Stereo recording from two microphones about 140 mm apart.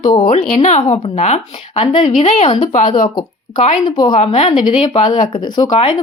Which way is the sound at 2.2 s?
55° left (ahead or behind).